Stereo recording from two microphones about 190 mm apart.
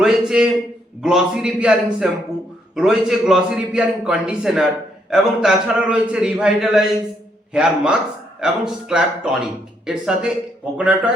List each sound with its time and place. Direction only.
0.0 s a man's voice: 5° right (ahead or behind)